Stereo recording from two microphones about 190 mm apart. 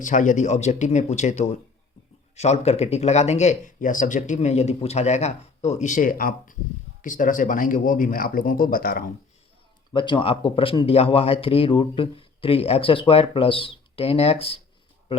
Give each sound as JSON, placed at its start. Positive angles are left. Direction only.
{"t": 0.0, "sound": "speech", "side_deg": 40}
{"t": 9.9, "sound": "speech", "side_deg": 25}
{"t": 15.1, "sound": "a sound", "side_deg": 30}